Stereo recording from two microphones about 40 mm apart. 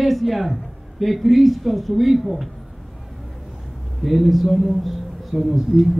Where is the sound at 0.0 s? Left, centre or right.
Centre.